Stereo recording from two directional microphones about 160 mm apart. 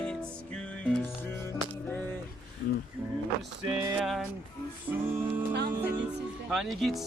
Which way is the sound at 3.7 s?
15° right (ahead or behind).